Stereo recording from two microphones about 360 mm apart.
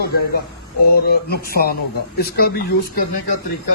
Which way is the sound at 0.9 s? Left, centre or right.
Left.